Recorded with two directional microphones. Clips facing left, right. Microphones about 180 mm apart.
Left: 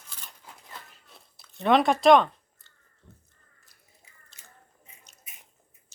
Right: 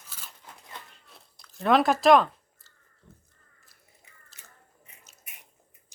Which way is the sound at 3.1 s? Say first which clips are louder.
Even; centre (ahead or behind).